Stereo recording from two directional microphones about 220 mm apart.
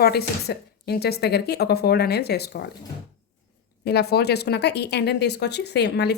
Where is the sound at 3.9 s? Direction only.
45° left (ahead or behind).